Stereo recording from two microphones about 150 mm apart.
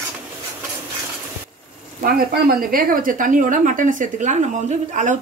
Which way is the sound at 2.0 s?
75° right (ahead or behind).